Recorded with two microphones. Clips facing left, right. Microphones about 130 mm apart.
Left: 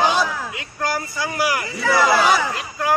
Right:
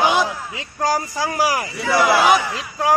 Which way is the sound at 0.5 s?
35° right (ahead or behind).